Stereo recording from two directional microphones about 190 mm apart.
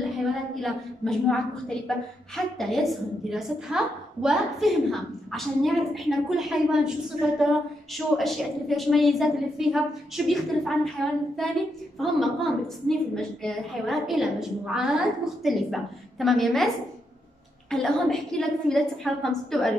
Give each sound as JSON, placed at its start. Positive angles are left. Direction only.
{"t": 0.2, "sound": "a woman's voice", "side_deg": 0}